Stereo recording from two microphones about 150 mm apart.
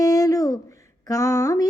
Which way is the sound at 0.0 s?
25° left (ahead or behind).